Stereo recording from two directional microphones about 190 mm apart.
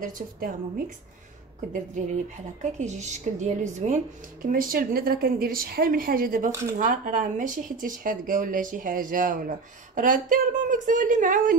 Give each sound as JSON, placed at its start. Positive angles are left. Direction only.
{"t": 0.0, "sound": "speech", "side_deg": -45}
{"t": 2.6, "sound": "speech", "side_deg": -40}